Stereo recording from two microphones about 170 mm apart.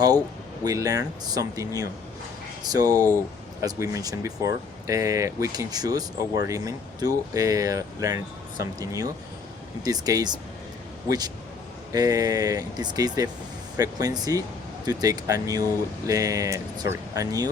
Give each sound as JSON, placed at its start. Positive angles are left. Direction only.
{"t": 0.6, "sound": "speech", "side_deg": -20}
{"t": 11.9, "sound": "speech", "side_deg": -20}